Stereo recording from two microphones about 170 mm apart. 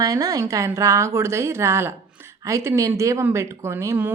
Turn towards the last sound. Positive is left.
turn(degrees=-15)  # may be behind; listen again after turning